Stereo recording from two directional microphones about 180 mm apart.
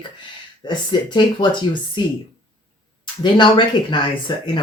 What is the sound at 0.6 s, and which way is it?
Speech, 25° left (ahead or behind).